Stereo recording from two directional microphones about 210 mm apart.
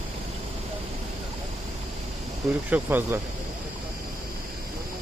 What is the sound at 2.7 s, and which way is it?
Speech, 10° right (ahead or behind).